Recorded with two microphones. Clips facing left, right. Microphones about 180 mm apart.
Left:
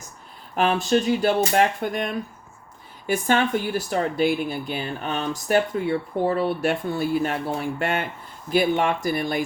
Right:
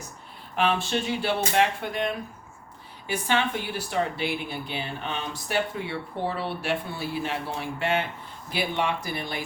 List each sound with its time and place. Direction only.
0.5 s speech: 45° left (ahead or behind)